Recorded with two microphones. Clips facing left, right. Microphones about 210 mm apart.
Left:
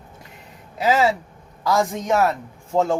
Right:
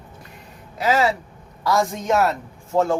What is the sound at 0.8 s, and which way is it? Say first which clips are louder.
A man's voice: left 1 dB; 20° left (ahead or behind).